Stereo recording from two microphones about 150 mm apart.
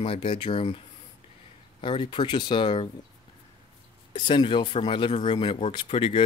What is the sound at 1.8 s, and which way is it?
Speech, 35° left (ahead or behind).